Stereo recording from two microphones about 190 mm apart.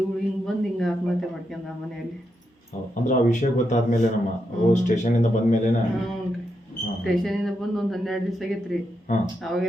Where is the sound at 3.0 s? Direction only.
40° left (ahead or behind).